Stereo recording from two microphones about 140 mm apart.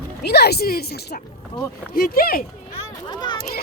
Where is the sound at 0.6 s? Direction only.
90° left.